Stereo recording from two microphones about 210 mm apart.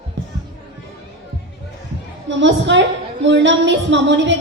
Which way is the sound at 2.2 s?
60° right (ahead or behind).